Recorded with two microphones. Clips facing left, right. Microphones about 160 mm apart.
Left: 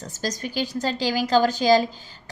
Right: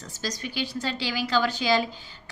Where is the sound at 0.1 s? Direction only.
45° left (ahead or behind).